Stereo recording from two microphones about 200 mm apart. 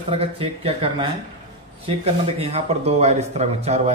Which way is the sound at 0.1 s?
30° right (ahead or behind).